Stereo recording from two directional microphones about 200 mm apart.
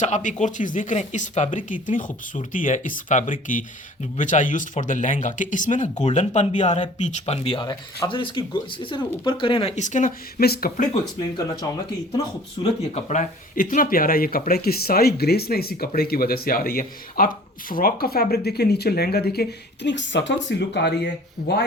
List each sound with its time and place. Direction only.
0.0 s speech: 40° left (ahead or behind)
12.6 s speech: 25° left (ahead or behind)
12.9 s speech: 35° left (ahead or behind); by 21.6 s 55° left (ahead or behind)